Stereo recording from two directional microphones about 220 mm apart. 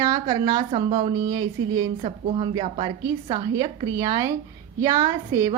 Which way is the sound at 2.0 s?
25° right (ahead or behind).